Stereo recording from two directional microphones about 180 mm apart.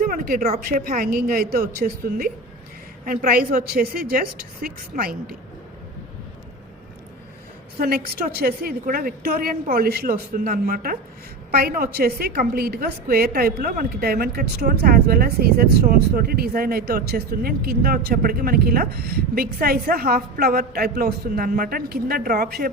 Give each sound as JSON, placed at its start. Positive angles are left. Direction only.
{"t": 0.0, "sound": "a woman's voice", "side_deg": -50}
{"t": 7.8, "sound": "a woman's voice", "side_deg": -60}